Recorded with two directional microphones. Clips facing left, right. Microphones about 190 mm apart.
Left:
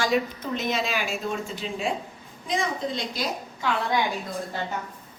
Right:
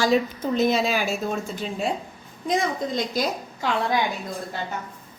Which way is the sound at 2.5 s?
45° right (ahead or behind).